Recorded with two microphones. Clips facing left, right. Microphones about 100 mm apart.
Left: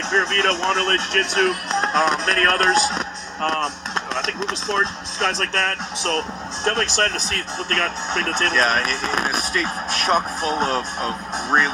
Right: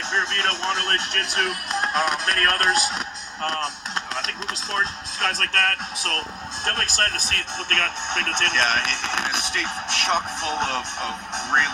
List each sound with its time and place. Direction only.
0.1 s speech: 35° left (ahead or behind)
6.0 s speech: 30° left (ahead or behind)